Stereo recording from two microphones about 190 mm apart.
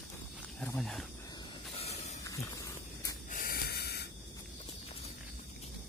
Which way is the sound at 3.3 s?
50° left (ahead or behind).